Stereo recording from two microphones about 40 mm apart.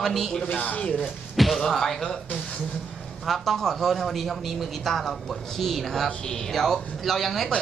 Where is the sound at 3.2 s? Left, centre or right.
Centre.